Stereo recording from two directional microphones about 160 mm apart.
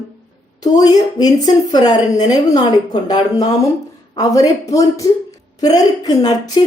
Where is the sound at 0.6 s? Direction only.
25° left (ahead or behind).